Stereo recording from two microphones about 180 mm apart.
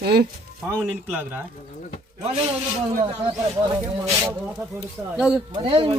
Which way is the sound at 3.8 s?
15° right (ahead or behind).